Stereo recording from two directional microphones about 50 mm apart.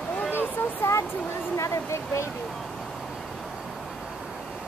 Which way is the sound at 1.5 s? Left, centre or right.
Left.